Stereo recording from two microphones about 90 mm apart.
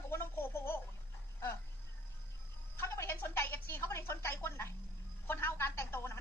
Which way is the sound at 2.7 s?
30° left (ahead or behind).